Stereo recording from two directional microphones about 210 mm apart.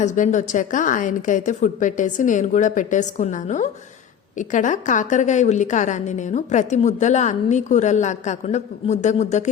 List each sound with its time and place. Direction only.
0.0 s a woman's voice: 35° left (ahead or behind)